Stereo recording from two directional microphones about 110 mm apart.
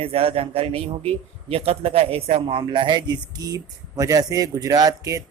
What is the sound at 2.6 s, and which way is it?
Speech, 45° right (ahead or behind).